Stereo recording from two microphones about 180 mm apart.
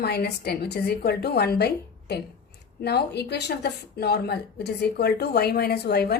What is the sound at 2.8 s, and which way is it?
Speech, 65° left (ahead or behind).